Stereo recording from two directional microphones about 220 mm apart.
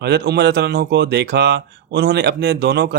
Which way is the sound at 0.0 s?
50° right (ahead or behind).